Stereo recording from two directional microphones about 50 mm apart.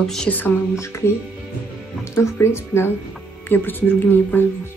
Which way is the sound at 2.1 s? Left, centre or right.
Left.